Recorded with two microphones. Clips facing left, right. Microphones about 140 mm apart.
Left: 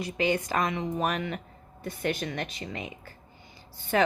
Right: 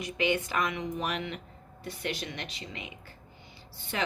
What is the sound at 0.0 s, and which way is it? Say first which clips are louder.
A woman's voice: left 2 dB; 40° left (ahead or behind).